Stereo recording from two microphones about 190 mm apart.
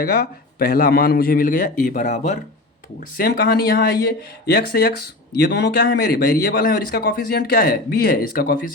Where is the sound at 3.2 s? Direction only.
50° left (ahead or behind).